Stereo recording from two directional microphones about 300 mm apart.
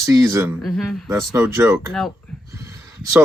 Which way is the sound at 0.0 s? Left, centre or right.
Centre.